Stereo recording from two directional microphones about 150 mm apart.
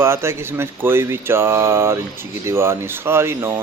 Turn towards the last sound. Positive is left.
turn(degrees=-15)  # may be behind; listen again after turning